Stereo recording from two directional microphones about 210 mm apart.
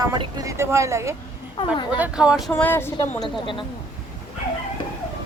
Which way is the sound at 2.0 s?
5° right (ahead or behind).